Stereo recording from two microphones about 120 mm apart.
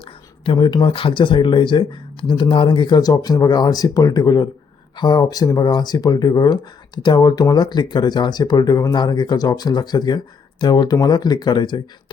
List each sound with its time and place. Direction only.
0.0 s speech: 45° left (ahead or behind)